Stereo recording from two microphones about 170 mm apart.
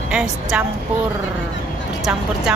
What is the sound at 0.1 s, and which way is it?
Speech, 5° right (ahead or behind).